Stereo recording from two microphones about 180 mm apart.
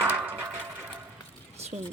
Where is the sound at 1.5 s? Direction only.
35° right (ahead or behind).